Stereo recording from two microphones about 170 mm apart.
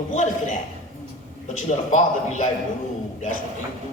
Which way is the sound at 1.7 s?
45° left (ahead or behind).